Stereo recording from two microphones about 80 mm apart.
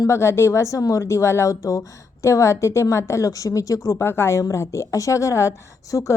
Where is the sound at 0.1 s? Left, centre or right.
Left.